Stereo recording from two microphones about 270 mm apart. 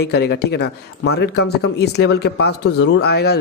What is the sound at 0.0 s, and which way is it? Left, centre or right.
Speech, left.